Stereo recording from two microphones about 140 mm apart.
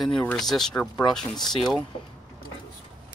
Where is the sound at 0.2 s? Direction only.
5° left (ahead or behind).